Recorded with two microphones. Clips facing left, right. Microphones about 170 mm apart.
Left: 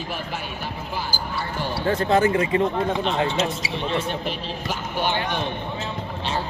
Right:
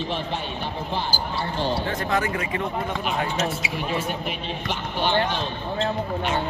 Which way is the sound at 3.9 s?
5° right (ahead or behind).